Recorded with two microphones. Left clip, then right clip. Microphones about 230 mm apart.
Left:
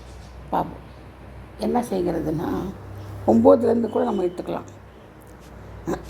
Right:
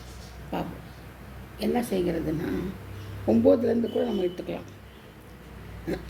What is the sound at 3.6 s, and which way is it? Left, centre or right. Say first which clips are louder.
Speech: left 5 dB; left.